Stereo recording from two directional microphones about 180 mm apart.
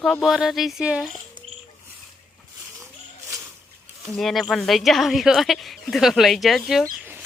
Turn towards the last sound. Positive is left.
turn(degrees=-10)  # may be behind; listen again after turning